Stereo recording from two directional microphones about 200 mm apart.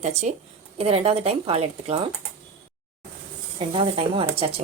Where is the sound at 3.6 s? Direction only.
30° right (ahead or behind).